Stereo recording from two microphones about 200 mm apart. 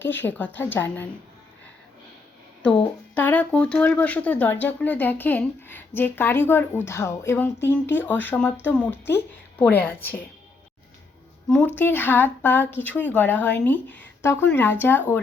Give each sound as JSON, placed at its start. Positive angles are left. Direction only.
{"t": 0.0, "sound": "speech", "side_deg": 10}
{"t": 2.6, "sound": "speech", "side_deg": 5}
{"t": 11.4, "sound": "speech", "side_deg": 5}